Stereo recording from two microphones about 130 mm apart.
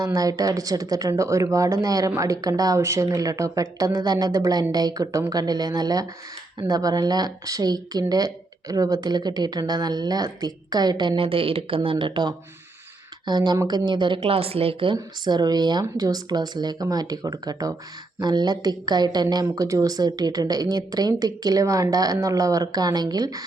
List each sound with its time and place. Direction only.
0.0 s a woman's voice: 25° right (ahead or behind); by 14.9 s 45° right (ahead or behind)
14.9 s a woman's voice: 35° right (ahead or behind)